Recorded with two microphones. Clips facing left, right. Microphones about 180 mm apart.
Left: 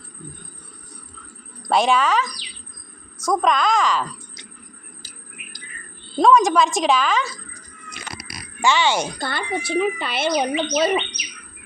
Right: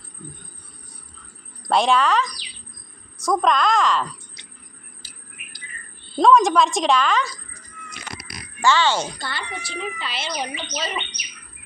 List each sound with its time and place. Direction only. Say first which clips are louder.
1.6 s a woman's voice: even; centre (ahead or behind)
6.1 s a woman's voice: even; centre (ahead or behind)
8.6 s speech: even; 15° left (ahead or behind)
9.1 s speech: left 6 dB; 55° left (ahead or behind)